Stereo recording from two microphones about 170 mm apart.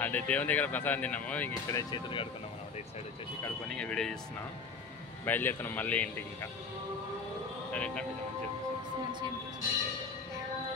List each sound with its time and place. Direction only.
0.0 s speech: 10° left (ahead or behind)
1.5 s speech: 20° left (ahead or behind)
3.6 s speech: 5° left (ahead or behind)
5.2 s speech: 10° left (ahead or behind)
7.7 s speech: 5° left (ahead or behind)